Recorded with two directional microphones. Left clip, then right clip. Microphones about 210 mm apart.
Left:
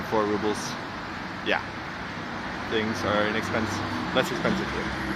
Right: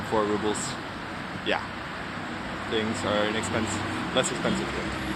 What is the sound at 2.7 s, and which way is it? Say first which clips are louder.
Speech: left 1 dB; centre (ahead or behind).